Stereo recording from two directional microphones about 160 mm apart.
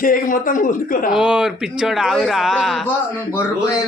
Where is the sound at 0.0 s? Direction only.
60° left (ahead or behind).